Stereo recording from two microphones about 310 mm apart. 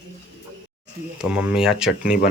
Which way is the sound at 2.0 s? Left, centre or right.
Left.